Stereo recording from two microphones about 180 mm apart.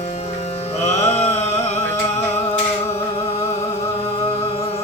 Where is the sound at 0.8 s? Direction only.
35° left (ahead or behind).